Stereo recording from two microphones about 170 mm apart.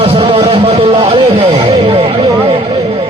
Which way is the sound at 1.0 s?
40° right (ahead or behind).